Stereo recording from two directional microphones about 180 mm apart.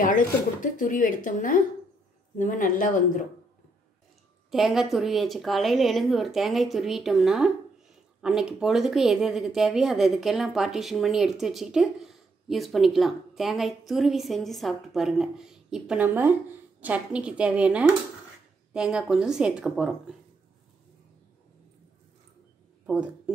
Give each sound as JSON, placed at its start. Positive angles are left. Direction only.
{"t": 0.0, "sound": "speech", "side_deg": 45}
{"t": 4.5, "sound": "a woman's voice", "side_deg": 0}
{"t": 22.8, "sound": "speech", "side_deg": -5}